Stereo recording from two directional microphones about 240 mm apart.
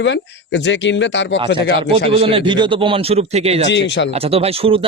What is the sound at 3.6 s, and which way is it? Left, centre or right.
Speech, left.